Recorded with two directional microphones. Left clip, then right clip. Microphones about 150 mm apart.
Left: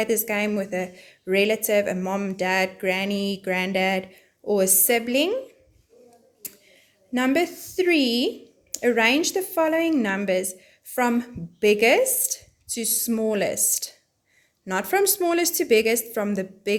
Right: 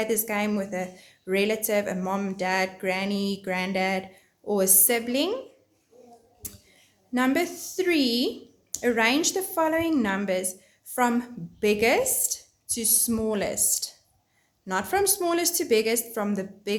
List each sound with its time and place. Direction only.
0.0 s a woman's voice: 35° left (ahead or behind)
6.4 s a sound: 35° left (ahead or behind)
8.7 s a woman's voice: 35° left (ahead or behind)